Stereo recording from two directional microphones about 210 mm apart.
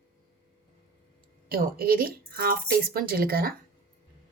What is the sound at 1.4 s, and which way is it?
A woman's voice, 45° right (ahead or behind).